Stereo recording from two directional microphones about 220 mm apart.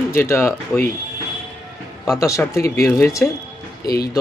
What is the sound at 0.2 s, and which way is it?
Speech, 10° left (ahead or behind).